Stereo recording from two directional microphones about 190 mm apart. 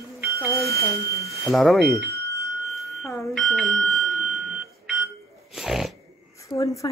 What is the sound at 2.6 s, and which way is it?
Bicycle bell, centre (ahead or behind).